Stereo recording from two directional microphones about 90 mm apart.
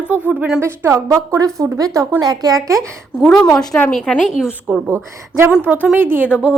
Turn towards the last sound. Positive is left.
turn(degrees=-10)  # may be behind; listen again after turning